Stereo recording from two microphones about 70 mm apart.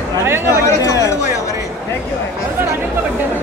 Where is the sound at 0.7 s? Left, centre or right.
Left.